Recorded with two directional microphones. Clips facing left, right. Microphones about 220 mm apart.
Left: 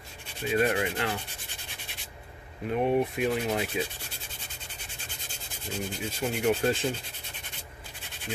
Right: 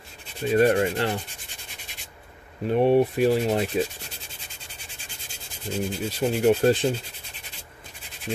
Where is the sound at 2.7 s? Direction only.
30° right (ahead or behind).